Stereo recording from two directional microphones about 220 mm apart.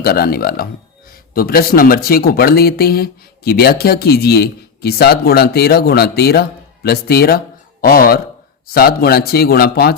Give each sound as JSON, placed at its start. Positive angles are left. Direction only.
{"t": 0.0, "sound": "speech", "side_deg": 45}